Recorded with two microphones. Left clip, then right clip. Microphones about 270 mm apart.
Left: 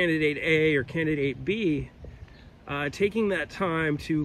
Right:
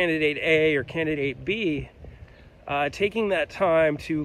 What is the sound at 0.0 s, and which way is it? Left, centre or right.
Speech, centre.